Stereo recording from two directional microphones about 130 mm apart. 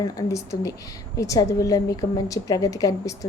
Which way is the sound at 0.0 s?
25° left (ahead or behind).